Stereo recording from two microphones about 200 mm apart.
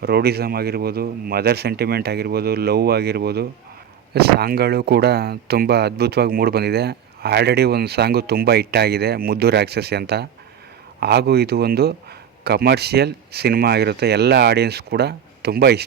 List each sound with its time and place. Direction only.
0.0 s speech: 55° right (ahead or behind)